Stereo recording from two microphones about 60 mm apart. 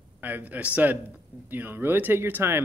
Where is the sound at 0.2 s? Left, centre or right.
Right.